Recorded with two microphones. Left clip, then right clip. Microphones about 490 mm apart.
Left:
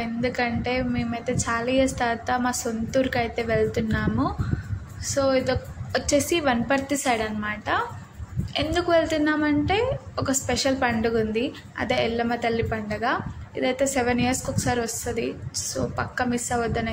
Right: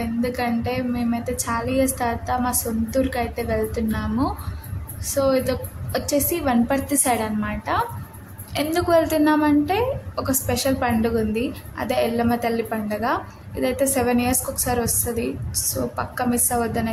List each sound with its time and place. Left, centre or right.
0.0 s a woman's voice: right